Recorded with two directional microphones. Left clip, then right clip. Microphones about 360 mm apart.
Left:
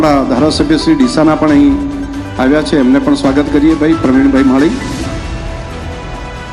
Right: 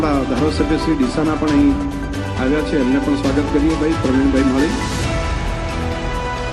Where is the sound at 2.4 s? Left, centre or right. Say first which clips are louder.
Left 8 dB; left.